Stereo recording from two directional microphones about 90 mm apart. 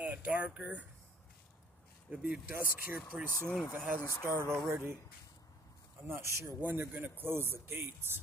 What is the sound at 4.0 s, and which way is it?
Speech, 35° left (ahead or behind).